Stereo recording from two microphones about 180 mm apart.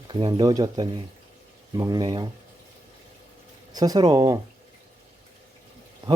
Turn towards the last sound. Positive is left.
turn(degrees=-20)  # may be behind; listen again after turning